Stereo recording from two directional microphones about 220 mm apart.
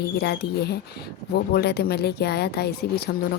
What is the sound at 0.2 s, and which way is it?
A woman's voice, 50° left (ahead or behind).